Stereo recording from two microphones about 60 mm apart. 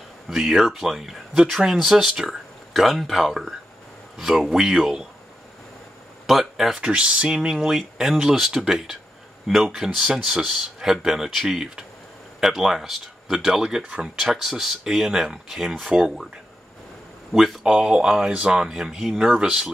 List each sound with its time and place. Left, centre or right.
0.3 s speech: centre
6.2 s speech: centre
6.8 s speech: centre
17.3 s speech: centre
17.6 s speech: centre
19.3 s speech: centre